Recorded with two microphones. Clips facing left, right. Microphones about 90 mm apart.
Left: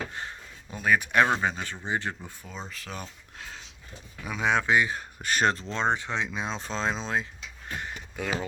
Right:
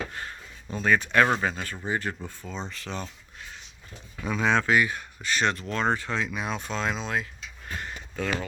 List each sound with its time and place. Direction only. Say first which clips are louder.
0.1 s speech: even; 20° left (ahead or behind)
4.4 s speech: right 1 dB; 15° left (ahead or behind)
5.2 s speech: left 1 dB; 45° left (ahead or behind)
5.5 s speech: right 1 dB; 25° left (ahead or behind)
7.8 s speech: right 3 dB; 15° left (ahead or behind)